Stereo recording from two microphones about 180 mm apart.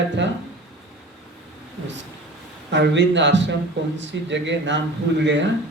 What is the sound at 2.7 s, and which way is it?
A woman's voice, 80° right.